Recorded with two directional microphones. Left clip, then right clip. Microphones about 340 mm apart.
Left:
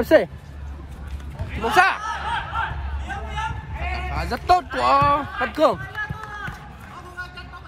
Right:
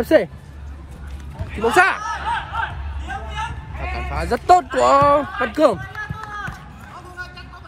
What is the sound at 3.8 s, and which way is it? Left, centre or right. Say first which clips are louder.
Sheep: right 2 dB; centre.